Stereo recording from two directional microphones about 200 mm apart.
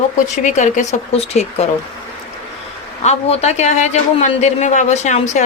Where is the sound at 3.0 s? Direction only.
35° left (ahead or behind).